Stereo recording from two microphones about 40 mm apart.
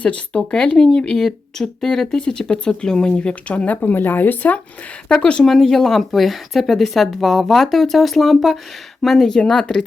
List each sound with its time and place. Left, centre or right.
0.0 s speech: left
0.5 s speech: centre
2.1 s speech: left
3.7 s speech: left
4.0 s speech: left
5.0 s speech: left
5.5 s speech: centre
9.4 s speech: left